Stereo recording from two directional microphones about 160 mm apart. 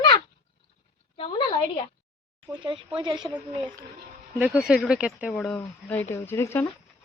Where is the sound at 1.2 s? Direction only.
30° left (ahead or behind).